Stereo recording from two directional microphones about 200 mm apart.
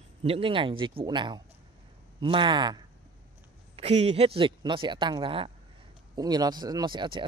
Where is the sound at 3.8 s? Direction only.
30° right (ahead or behind).